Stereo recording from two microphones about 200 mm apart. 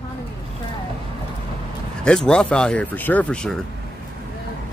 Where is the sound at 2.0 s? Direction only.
5° left (ahead or behind).